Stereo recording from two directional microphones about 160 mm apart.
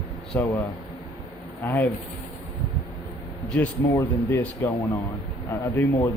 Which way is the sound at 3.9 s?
10° left (ahead or behind).